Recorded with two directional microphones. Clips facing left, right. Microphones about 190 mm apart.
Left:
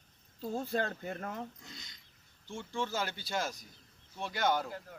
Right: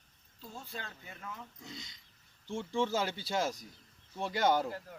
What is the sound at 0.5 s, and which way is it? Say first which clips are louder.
Speech: left 12 dB; 45° left (ahead or behind).